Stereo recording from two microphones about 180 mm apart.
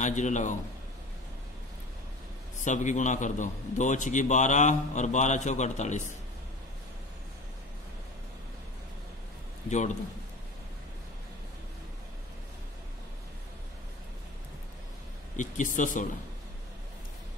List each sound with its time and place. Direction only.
0.0 s a man's voice: 40° left (ahead or behind)
2.6 s a man's voice: 45° left (ahead or behind)
9.7 s a man's voice: 40° left (ahead or behind)
15.3 s a man's voice: 45° left (ahead or behind)